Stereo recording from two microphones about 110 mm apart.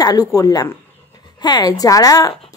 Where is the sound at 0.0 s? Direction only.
35° left (ahead or behind).